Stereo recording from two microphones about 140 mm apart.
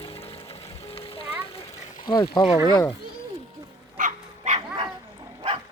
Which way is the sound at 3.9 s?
65° right (ahead or behind).